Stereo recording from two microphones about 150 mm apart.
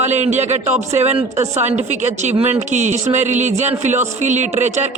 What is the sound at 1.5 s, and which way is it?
Speech, 50° right (ahead or behind).